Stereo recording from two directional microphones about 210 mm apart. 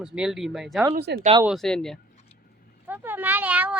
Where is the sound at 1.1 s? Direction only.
55° right (ahead or behind).